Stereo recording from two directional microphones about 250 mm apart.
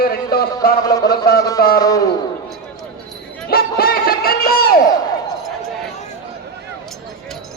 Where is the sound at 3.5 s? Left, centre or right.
Left.